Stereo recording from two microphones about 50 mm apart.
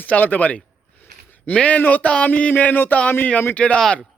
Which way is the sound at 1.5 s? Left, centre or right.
Left.